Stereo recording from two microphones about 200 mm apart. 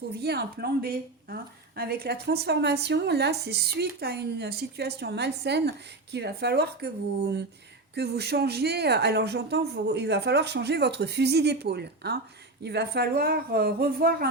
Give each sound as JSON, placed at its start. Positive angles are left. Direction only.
{"t": 0.1, "sound": "a woman's voice", "side_deg": -55}